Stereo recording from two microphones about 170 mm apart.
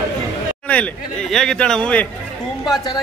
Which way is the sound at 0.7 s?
5° left (ahead or behind).